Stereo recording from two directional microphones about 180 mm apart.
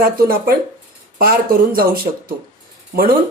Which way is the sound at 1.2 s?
55° right (ahead or behind).